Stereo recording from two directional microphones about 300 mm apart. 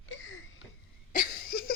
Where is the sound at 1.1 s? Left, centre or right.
Left.